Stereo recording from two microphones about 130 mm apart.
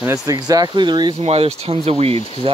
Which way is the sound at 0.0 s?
25° right (ahead or behind).